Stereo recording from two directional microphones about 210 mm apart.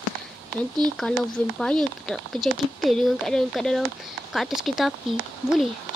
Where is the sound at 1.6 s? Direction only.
5° left (ahead or behind).